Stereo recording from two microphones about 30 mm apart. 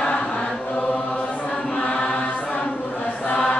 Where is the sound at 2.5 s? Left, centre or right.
Left.